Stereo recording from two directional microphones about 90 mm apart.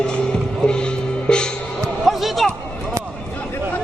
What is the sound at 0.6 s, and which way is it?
Music, 10° left (ahead or behind).